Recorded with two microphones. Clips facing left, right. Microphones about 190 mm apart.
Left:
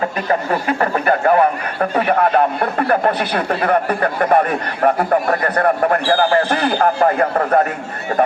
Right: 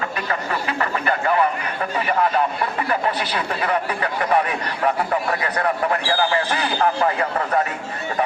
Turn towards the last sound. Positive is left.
turn(degrees=50)  # may be behind; listen again after turning